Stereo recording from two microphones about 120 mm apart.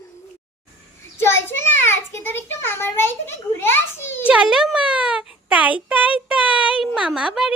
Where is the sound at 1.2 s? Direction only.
20° left (ahead or behind).